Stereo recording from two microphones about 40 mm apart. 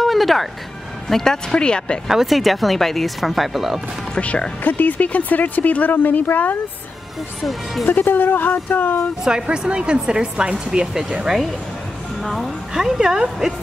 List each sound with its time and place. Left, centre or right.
0.0 s music: centre
1.0 s speech: centre
2.0 s speech: centre
4.6 s speech: left
7.8 s speech: left
9.2 s speech: centre
12.2 s a woman's voice: centre
12.7 s speech: centre